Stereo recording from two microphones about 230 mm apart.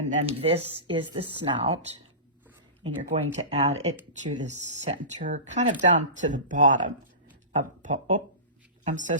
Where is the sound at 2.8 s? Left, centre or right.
Right.